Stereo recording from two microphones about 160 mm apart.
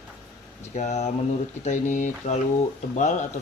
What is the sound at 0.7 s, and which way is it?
Speech, 40° left (ahead or behind).